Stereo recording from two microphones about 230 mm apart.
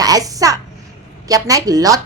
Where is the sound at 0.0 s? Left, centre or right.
Centre.